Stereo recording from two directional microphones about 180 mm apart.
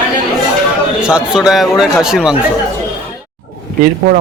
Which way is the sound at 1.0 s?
5° right (ahead or behind).